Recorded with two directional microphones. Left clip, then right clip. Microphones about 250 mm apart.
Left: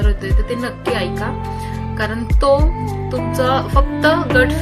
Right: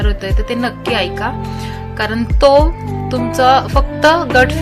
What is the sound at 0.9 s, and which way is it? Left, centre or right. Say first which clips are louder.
Speech: right 4 dB; right.